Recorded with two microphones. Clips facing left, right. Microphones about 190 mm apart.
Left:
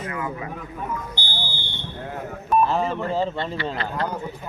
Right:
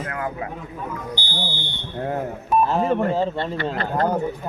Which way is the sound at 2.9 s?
50° right (ahead or behind).